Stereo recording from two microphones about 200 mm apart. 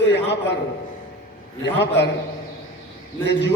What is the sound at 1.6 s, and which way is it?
Speech, 60° left (ahead or behind).